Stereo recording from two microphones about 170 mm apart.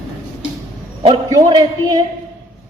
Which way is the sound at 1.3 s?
25° right (ahead or behind).